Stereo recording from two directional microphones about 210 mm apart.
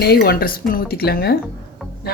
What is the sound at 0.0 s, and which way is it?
A woman's voice, 45° left (ahead or behind).